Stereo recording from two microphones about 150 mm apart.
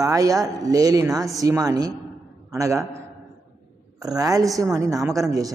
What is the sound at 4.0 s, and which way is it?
A man's voice, 25° right (ahead or behind).